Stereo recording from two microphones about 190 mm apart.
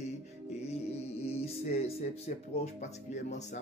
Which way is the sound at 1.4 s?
30° left (ahead or behind).